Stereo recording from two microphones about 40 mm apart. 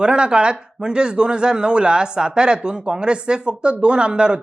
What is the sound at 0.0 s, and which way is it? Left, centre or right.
Speech, right.